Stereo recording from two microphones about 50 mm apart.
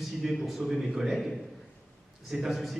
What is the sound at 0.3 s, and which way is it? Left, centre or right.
A man's voice, centre.